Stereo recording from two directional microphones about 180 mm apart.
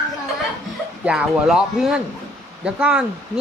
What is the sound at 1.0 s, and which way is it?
Speech, 5° right (ahead or behind).